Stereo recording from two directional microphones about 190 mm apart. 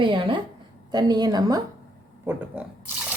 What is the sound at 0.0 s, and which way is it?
A woman's voice, 25° right (ahead or behind).